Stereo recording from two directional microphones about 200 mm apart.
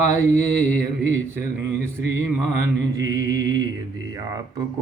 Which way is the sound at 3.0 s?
15° right (ahead or behind).